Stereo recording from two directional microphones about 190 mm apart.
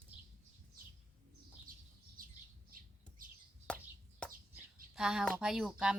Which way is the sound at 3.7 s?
5° left (ahead or behind).